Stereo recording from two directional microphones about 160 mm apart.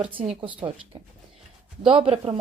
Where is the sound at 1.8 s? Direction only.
35° right (ahead or behind).